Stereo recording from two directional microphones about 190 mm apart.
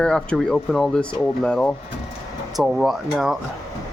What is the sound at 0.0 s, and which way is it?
Speech, 5° left (ahead or behind).